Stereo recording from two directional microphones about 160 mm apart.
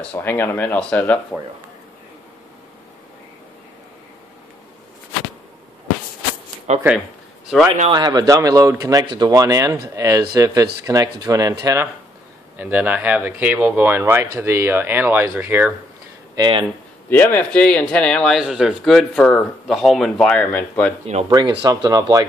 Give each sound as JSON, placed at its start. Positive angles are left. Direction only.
{"t": 0.0, "sound": "speech", "side_deg": 10}
{"t": 6.7, "sound": "speech", "side_deg": -45}
{"t": 7.5, "sound": "speech", "side_deg": 0}
{"t": 7.9, "sound": "speech", "side_deg": -25}
{"t": 16.3, "sound": "speech", "side_deg": -30}
{"t": 17.1, "sound": "speech", "side_deg": 10}
{"t": 21.3, "sound": "speech", "side_deg": -30}